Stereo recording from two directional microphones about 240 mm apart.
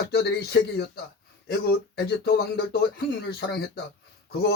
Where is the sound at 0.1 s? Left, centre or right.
Left.